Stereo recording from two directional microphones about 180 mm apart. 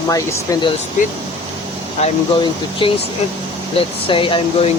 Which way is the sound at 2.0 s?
30° left (ahead or behind).